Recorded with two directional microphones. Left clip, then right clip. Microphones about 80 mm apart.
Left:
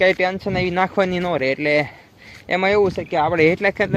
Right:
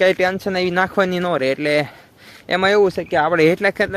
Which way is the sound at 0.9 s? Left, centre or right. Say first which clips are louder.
Right 1 dB; right.